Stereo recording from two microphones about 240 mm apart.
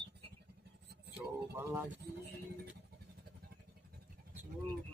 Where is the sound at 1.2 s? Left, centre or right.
Centre.